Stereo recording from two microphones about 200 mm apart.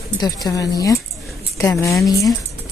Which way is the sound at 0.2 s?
15° left (ahead or behind).